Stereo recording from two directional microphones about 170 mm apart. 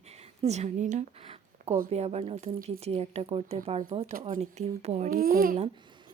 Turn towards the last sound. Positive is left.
turn(degrees=-60)  # may be behind; listen again after turning